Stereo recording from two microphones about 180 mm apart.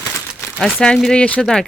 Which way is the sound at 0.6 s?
Centre (ahead or behind).